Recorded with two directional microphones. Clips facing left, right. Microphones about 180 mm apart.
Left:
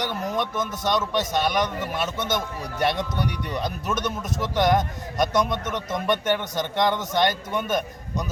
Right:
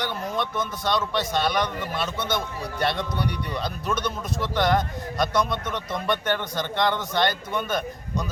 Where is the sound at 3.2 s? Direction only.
15° left (ahead or behind).